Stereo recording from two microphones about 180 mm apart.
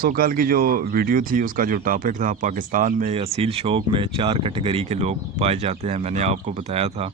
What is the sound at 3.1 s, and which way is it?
Speech, 35° right (ahead or behind).